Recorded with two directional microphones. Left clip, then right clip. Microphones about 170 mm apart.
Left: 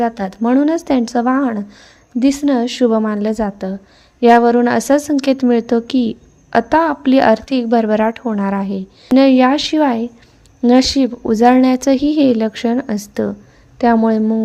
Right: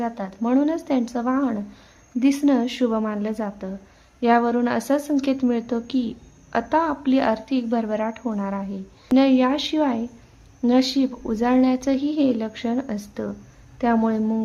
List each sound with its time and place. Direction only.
0.0 s a woman's voice: 35° left (ahead or behind)